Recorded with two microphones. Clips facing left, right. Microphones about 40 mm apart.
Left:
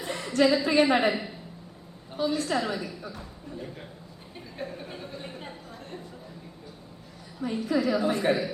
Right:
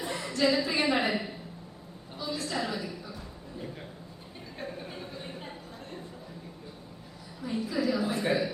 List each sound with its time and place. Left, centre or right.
0.1 s a sound: left
0.3 s a woman's voice: left
1.1 s speech: centre
2.1 s a woman's voice: left
4.5 s speech: centre
5.3 s chatter: centre
7.6 s a woman's voice: left